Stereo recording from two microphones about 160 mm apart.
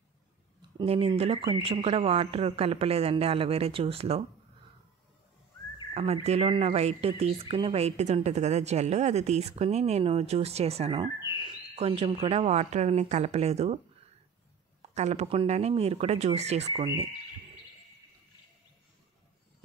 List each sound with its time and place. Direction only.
0.7 s speech: 35° right (ahead or behind)
6.2 s speech: 40° right (ahead or behind)
14.8 s speech: 45° right (ahead or behind)